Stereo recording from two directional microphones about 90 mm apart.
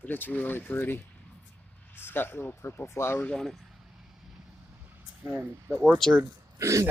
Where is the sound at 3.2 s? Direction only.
10° left (ahead or behind).